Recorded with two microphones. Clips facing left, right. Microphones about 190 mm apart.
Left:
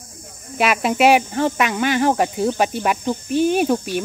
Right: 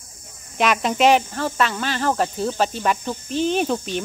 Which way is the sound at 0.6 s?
5° left (ahead or behind).